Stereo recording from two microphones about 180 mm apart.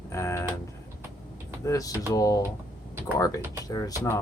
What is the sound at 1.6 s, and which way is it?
Speech, 20° left (ahead or behind).